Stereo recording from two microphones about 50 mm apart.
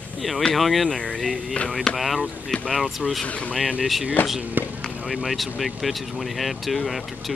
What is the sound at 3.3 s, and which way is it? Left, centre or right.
Speech, left.